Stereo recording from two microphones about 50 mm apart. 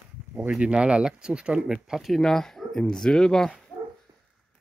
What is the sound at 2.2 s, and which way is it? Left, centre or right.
Speech, centre.